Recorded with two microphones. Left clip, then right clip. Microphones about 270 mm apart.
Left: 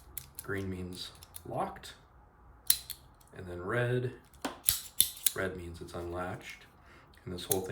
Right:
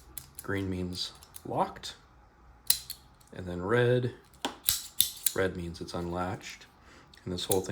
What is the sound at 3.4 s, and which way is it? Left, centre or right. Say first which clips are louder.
Speech: right 6 dB; centre.